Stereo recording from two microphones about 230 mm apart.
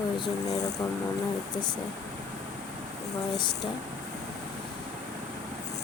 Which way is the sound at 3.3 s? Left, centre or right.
Centre.